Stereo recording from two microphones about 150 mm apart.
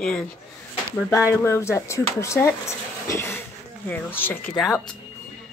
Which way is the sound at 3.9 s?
10° left (ahead or behind).